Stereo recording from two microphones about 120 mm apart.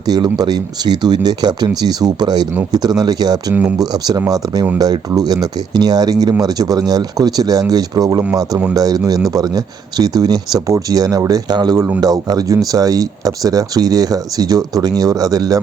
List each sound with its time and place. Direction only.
0.0 s speech: 35° right (ahead or behind)
3.5 s speech: 10° right (ahead or behind)
3.8 s speech: 35° right (ahead or behind)